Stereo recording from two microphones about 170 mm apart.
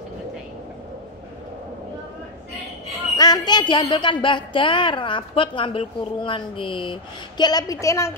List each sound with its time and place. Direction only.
3.2 s a woman's voice: 25° left (ahead or behind)